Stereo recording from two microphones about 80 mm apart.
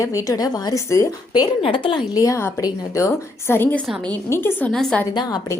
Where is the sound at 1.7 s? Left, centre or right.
Left.